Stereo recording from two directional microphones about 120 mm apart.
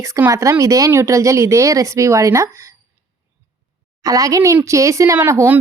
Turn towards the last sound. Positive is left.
turn(degrees=-20)  # may be behind; listen again after turning